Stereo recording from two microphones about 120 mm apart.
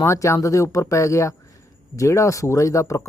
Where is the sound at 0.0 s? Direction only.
25° left (ahead or behind).